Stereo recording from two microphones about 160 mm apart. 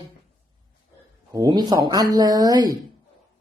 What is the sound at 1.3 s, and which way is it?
Speech, 25° right (ahead or behind).